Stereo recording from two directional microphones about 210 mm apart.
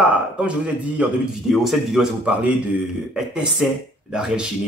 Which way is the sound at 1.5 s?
Centre (ahead or behind).